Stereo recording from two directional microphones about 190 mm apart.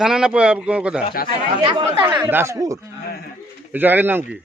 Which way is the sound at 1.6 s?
25° right (ahead or behind).